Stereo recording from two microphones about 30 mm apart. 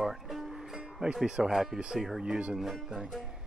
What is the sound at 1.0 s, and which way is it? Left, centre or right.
Speech, right.